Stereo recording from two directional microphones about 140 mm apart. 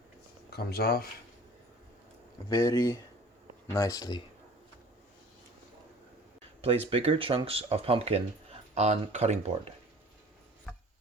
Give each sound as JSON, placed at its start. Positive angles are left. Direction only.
{"t": 0.7, "sound": "speech", "side_deg": 90}
{"t": 2.5, "sound": "speech", "side_deg": 20}
{"t": 6.6, "sound": "speech", "side_deg": -45}